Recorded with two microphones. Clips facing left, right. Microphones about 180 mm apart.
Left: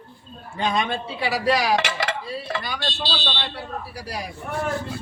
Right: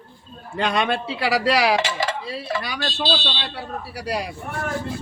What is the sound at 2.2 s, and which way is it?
Mechanisms, 80° right.